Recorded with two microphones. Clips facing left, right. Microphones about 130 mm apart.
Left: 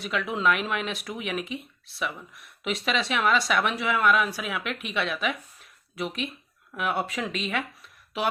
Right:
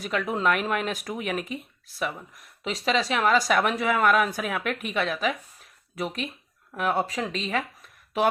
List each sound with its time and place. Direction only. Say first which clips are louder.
0.0 s speech: right 1 dB; 40° right (ahead or behind)